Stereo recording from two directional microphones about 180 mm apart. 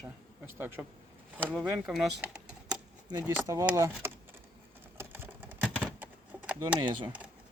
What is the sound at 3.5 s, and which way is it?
Speech, 20° right (ahead or behind).